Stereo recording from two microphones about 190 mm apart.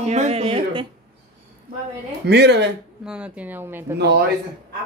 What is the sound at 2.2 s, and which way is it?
Speech, 60° right (ahead or behind).